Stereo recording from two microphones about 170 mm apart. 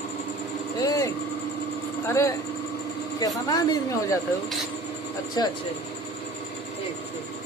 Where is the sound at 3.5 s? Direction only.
20° left (ahead or behind).